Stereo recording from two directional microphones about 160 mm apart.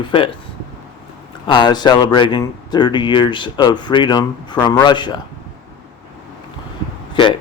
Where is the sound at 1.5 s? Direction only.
30° left (ahead or behind).